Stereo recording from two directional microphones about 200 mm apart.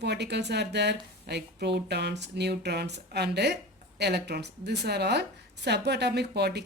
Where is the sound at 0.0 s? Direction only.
60° right (ahead or behind).